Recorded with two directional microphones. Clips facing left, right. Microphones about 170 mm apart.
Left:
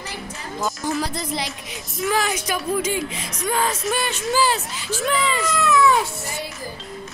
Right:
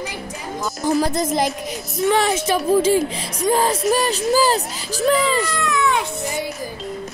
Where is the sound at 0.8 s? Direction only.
40° right (ahead or behind).